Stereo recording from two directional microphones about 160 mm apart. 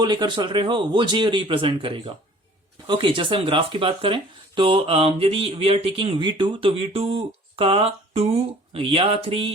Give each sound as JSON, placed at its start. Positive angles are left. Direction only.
{"t": 0.0, "sound": "speech", "side_deg": -25}